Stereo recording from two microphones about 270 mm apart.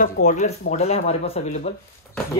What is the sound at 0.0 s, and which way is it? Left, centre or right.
Speech, left.